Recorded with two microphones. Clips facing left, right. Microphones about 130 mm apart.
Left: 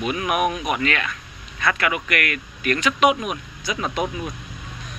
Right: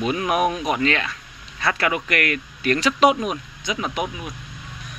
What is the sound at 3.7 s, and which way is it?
Speech, 15° right (ahead or behind).